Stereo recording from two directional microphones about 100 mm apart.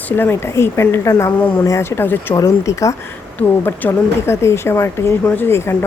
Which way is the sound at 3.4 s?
20° left (ahead or behind).